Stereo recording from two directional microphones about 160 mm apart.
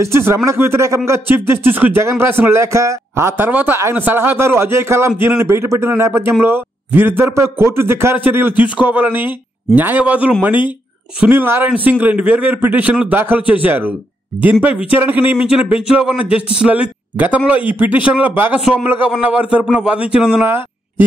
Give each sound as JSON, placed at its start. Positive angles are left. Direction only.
{"t": 0.0, "sound": "a man's voice", "side_deg": -15}